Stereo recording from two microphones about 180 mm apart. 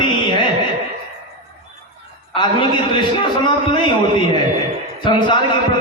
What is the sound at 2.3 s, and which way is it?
A man's voice, 25° left (ahead or behind).